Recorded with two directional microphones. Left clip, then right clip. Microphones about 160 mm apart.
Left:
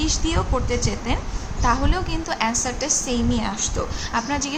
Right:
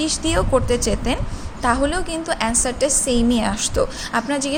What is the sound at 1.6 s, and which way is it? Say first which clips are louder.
A woman's voice: right 3 dB; 35° right (ahead or behind).